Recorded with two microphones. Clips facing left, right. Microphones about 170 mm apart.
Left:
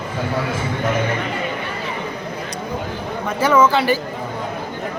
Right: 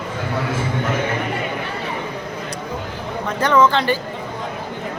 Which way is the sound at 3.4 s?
5° left (ahead or behind).